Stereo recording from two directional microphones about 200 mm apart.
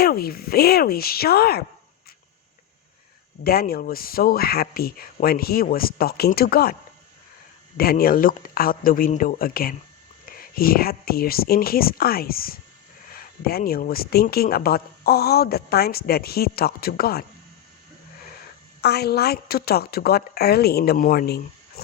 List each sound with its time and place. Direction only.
0.0 s speech: 50° left (ahead or behind)
3.4 s speech: 50° left (ahead or behind)
7.8 s speech: 50° left (ahead or behind)
18.8 s speech: 55° left (ahead or behind)